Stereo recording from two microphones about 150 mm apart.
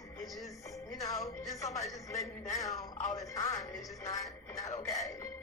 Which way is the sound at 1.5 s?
20° left (ahead or behind).